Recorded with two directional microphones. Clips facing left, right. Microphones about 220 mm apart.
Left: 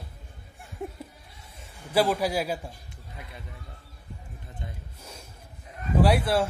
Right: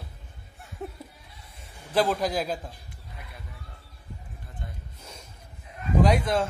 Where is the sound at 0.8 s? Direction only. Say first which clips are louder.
Left 1 dB; 15° left (ahead or behind).